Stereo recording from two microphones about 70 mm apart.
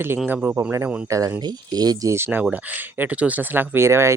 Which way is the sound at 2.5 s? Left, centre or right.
Right.